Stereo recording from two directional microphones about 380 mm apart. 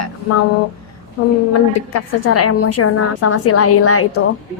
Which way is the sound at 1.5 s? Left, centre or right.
Left.